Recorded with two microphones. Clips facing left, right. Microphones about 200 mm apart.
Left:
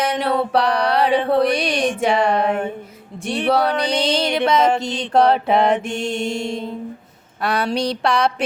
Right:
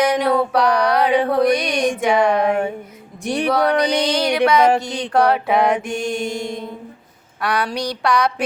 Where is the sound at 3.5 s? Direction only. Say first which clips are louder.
Right 1 dB; 30° left (ahead or behind).